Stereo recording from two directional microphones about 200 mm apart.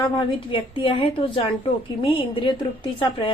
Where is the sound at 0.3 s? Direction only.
25° left (ahead or behind).